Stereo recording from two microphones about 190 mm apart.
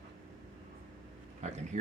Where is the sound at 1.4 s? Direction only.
35° right (ahead or behind).